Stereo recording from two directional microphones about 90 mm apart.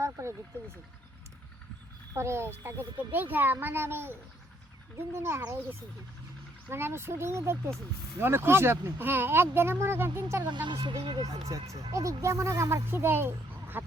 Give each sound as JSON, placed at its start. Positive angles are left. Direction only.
{"t": 0.0, "sound": "vehicle", "side_deg": -30}
{"t": 2.1, "sound": "speech", "side_deg": -30}
{"t": 6.7, "sound": "speech", "side_deg": -25}
{"t": 10.4, "sound": "speech", "side_deg": -60}
{"t": 11.2, "sound": "speech", "side_deg": -40}